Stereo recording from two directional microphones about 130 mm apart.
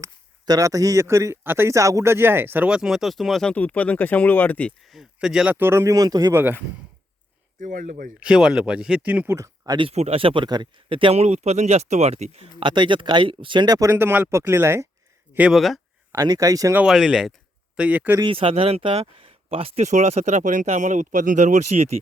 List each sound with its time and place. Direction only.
0.0 s speech: 25° right (ahead or behind); by 3.5 s centre (ahead or behind)
3.5 s speech: 10° left (ahead or behind)
4.9 s speech: 5° right (ahead or behind)
5.5 s speech: 20° right (ahead or behind)
6.3 s speech: 15° right (ahead or behind)
7.6 s speech: 85° right
8.2 s speech: 5° right (ahead or behind); by 9.7 s 20° right (ahead or behind)
9.7 s a man's voice: 50° right (ahead or behind); by 14.8 s 20° right (ahead or behind)
15.4 s speech: 5° right (ahead or behind)
16.1 s speech: 30° right (ahead or behind)
16.7 s speech: 5° right (ahead or behind)
18.3 s speech: 45° right (ahead or behind); by 21.9 s 60° right (ahead or behind)